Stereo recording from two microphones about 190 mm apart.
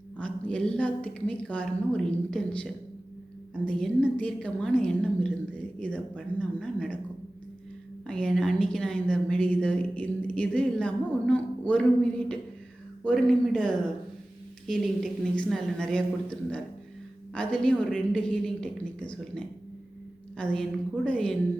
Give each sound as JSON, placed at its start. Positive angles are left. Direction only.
{"t": 0.2, "sound": "a woman's voice", "side_deg": 5}
{"t": 8.0, "sound": "a woman's voice", "side_deg": 5}
{"t": 17.3, "sound": "a woman's voice", "side_deg": 5}